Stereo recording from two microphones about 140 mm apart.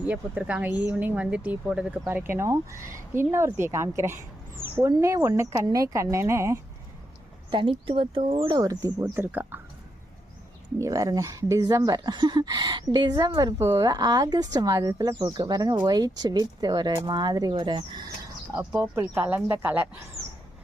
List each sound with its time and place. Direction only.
0.0 s speech: 10° right (ahead or behind)
7.5 s speech: 40° right (ahead or behind)
8.5 s speech: 30° right (ahead or behind)
9.0 s speech: 15° right (ahead or behind)
10.8 s speech: 25° right (ahead or behind)
18.5 s speech: 20° right (ahead or behind)